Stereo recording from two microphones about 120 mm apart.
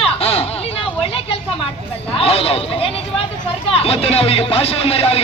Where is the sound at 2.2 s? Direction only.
55° left (ahead or behind).